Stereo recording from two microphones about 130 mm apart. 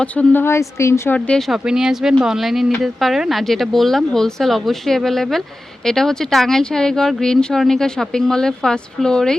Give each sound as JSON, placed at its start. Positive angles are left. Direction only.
{"t": 0.0, "sound": "a woman's voice", "side_deg": 10}
{"t": 1.3, "sound": "speech", "side_deg": 0}